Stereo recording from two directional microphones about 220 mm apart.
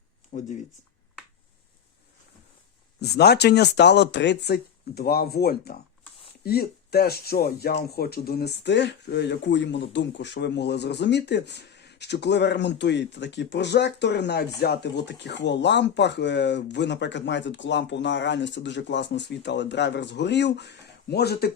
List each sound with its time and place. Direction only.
0.3 s speech: 30° left (ahead or behind)
3.0 s speech: 45° left (ahead or behind)